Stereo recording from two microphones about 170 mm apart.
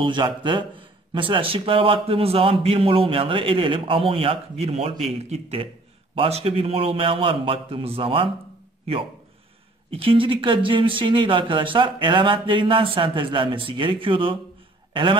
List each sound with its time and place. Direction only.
0.0 s a man's voice: 30° right (ahead or behind)
9.8 s speech: 30° right (ahead or behind)